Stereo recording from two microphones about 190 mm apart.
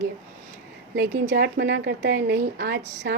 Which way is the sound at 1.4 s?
65° right (ahead or behind).